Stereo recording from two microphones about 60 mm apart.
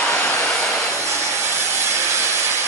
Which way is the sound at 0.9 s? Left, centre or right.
Right.